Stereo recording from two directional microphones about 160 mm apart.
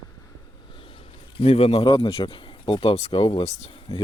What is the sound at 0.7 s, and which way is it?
A man's voice, 35° left (ahead or behind).